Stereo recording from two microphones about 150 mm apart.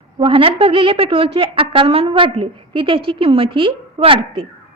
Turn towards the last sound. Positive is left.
turn(degrees=-35)  # may be behind; listen again after turning